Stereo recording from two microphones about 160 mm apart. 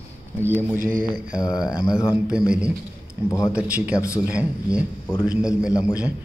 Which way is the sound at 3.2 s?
20° left (ahead or behind).